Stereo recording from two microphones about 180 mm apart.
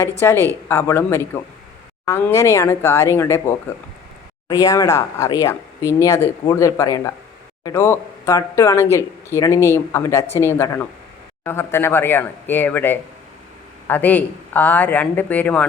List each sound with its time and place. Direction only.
0.2 s a man's voice: 15° left (ahead or behind)